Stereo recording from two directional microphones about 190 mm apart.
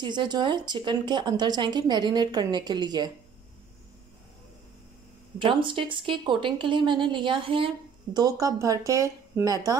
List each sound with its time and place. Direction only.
0.0 s speech: 25° right (ahead or behind)
5.4 s speech: 25° right (ahead or behind)